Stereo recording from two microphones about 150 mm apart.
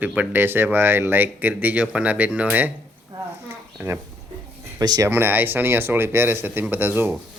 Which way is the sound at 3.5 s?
15° right (ahead or behind).